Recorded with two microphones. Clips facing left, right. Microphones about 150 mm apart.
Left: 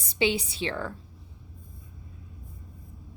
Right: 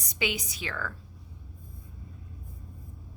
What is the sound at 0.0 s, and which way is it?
Speech, 30° left (ahead or behind).